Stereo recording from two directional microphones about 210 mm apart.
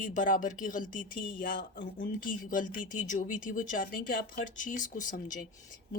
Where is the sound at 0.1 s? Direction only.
40° left (ahead or behind).